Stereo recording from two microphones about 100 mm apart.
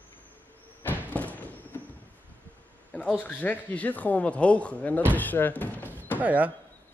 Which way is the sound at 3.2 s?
15° left (ahead or behind).